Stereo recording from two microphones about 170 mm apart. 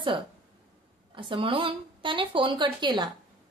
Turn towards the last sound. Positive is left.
turn(degrees=-25)  # may be behind; listen again after turning